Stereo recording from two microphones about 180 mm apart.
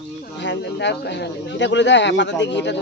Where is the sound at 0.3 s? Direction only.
75° left (ahead or behind).